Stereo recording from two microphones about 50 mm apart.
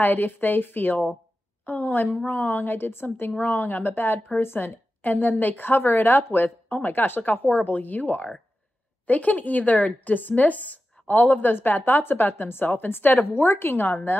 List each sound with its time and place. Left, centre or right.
0.0 s a woman's voice: left
13.3 s a woman's voice: left